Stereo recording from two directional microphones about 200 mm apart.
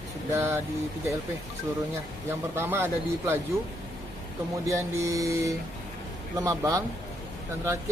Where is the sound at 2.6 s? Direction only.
10° right (ahead or behind).